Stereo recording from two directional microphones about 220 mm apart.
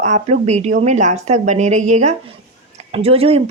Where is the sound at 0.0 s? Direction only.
30° right (ahead or behind).